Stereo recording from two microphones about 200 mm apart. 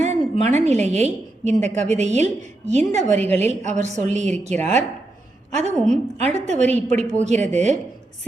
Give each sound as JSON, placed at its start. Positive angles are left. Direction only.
{"t": 0.0, "sound": "a woman's voice", "side_deg": -35}